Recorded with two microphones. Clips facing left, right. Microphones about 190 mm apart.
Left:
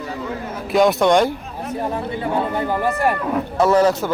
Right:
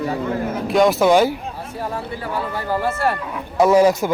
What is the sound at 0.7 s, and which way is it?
Speech, centre (ahead or behind).